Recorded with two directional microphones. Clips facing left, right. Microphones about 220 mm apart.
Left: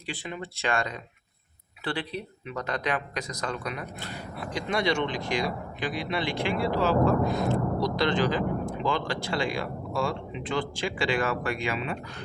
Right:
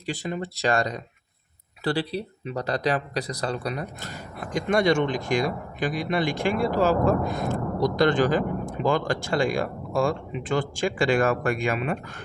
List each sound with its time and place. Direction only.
0.0 s speech: 40° right (ahead or behind)